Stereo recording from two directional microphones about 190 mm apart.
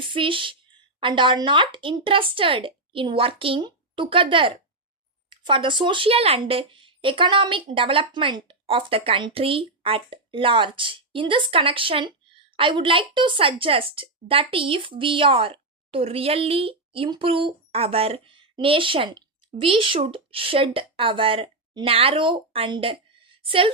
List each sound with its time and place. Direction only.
0.0 s a woman's voice: 25° right (ahead or behind)